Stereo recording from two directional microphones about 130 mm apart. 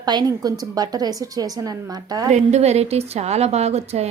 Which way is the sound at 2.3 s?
60° right (ahead or behind).